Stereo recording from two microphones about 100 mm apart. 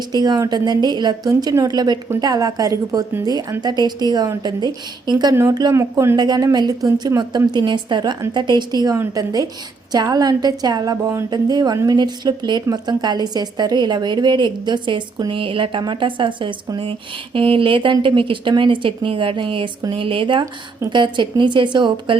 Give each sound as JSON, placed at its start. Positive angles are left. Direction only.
{"t": 0.1, "sound": "a woman's voice", "side_deg": -45}
{"t": 5.3, "sound": "speech", "side_deg": -30}
{"t": 6.1, "sound": "a woman's voice", "side_deg": -45}